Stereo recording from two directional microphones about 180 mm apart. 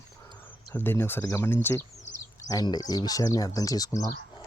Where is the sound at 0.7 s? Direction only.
10° left (ahead or behind).